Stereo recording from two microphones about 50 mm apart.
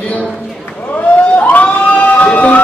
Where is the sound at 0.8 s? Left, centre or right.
Left.